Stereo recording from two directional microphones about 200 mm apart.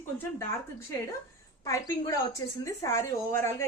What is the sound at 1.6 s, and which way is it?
A woman's voice, 15° left (ahead or behind).